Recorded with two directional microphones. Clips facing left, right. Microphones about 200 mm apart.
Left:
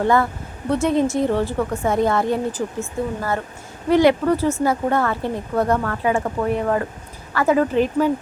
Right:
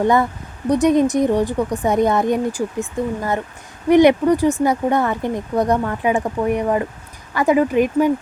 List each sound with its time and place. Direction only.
0.0 s speech: 15° right (ahead or behind)